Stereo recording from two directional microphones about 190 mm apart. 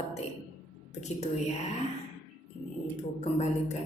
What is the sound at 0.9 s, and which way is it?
Speech, 35° left (ahead or behind).